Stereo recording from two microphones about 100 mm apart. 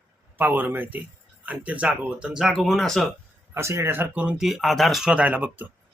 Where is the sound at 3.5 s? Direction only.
30° right (ahead or behind).